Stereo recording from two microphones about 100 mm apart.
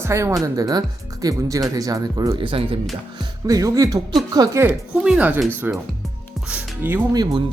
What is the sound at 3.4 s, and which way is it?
Speech, 35° right (ahead or behind).